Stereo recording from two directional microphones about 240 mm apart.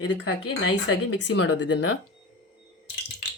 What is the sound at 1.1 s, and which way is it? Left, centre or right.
Speech, left.